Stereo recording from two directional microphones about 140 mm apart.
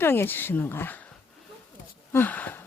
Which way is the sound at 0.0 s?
15° left (ahead or behind).